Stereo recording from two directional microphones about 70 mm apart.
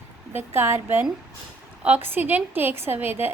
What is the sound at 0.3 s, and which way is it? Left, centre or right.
A woman's voice, right.